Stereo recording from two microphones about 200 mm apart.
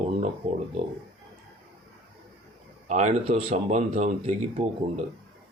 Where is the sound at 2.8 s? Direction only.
35° right (ahead or behind).